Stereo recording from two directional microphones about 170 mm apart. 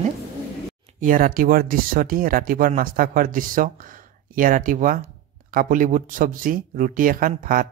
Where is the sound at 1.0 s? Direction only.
55° right (ahead or behind).